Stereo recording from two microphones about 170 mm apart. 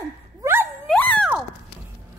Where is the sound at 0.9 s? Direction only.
5° left (ahead or behind).